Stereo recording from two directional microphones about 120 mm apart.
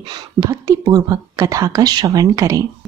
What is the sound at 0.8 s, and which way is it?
Speech, 30° right (ahead or behind).